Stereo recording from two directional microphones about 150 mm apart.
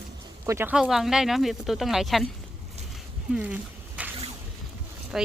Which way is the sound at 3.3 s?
10° right (ahead or behind).